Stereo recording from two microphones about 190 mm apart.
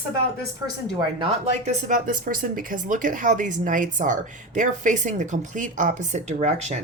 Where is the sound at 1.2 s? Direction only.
40° right (ahead or behind).